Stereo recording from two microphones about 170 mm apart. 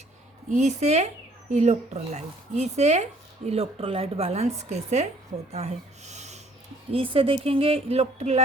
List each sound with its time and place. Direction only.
0.5 s speech: 40° right (ahead or behind)